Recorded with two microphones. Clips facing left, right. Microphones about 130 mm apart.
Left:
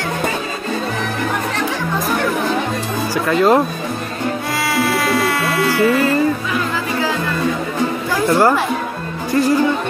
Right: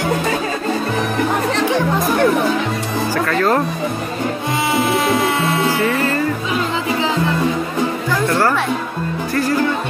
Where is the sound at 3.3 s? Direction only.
20° left (ahead or behind).